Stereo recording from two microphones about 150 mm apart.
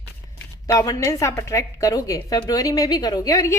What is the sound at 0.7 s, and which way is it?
A woman's voice, 20° left (ahead or behind).